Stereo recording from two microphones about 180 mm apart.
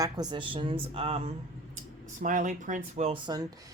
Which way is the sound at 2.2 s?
45° right (ahead or behind).